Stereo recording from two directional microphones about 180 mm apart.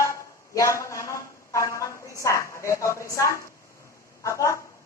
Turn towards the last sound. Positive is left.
turn(degrees=15)  # may be behind; listen again after turning